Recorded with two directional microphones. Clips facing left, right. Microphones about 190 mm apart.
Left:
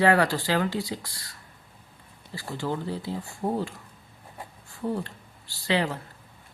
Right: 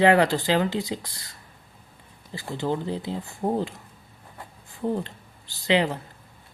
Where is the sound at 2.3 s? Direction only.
20° right (ahead or behind).